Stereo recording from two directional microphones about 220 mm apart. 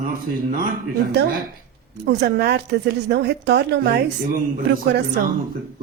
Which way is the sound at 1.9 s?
50° right (ahead or behind).